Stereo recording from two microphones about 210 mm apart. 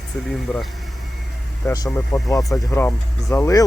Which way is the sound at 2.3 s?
15° left (ahead or behind).